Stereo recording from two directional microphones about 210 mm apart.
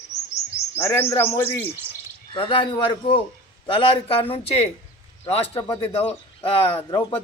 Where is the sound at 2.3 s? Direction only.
25° left (ahead or behind).